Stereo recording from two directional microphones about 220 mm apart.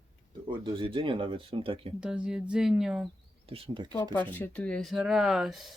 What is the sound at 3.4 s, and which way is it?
Speech, 25° right (ahead or behind).